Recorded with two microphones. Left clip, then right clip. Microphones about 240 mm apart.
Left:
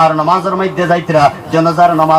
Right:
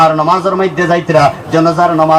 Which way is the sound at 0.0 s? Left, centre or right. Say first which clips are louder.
Right 1 dB; right.